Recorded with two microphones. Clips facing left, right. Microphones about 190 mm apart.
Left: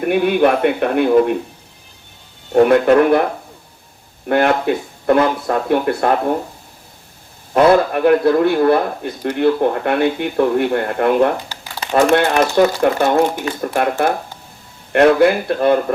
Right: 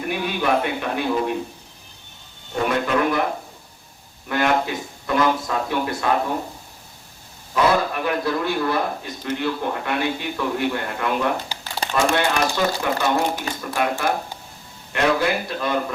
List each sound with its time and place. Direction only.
0.0 s a man's voice: 60° left (ahead or behind)
2.5 s a man's voice: 55° left (ahead or behind)
4.3 s a man's voice: 60° left (ahead or behind)
7.5 s a man's voice: 55° left (ahead or behind)
14.9 s a man's voice: 60° left (ahead or behind)